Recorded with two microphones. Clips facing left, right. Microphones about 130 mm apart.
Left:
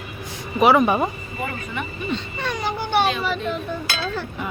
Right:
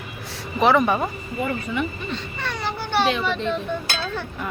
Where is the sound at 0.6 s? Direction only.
10° left (ahead or behind).